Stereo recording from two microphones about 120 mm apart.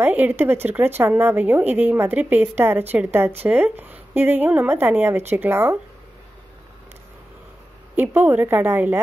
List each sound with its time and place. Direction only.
0.0 s a woman's voice: 15° right (ahead or behind)
7.9 s a woman's voice: 15° right (ahead or behind)